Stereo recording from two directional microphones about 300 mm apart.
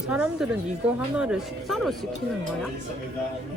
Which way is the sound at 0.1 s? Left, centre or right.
Centre.